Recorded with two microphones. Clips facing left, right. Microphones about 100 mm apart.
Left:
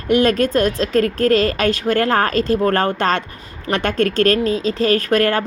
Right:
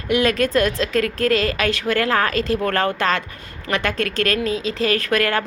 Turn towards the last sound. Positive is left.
turn(degrees=40)  # may be behind; listen again after turning